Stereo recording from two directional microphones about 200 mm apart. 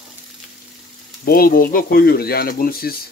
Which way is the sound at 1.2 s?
45° left (ahead or behind).